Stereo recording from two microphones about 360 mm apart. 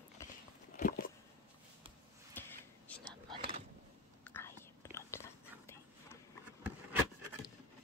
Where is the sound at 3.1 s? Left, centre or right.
Centre.